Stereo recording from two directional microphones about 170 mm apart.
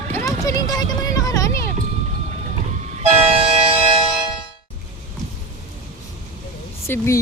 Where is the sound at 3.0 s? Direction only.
35° right (ahead or behind).